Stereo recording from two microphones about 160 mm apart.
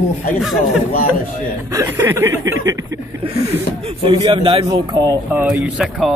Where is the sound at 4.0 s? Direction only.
30° right (ahead or behind).